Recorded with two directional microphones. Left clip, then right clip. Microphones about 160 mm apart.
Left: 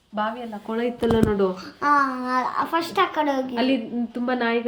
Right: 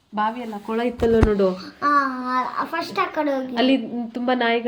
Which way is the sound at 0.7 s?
30° right (ahead or behind).